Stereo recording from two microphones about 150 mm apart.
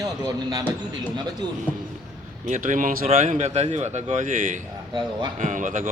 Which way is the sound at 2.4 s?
55° right (ahead or behind).